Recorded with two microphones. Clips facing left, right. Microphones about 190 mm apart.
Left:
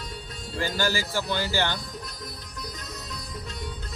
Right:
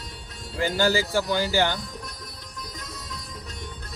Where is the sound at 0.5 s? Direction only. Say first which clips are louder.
Right 5 dB; 20° right (ahead or behind).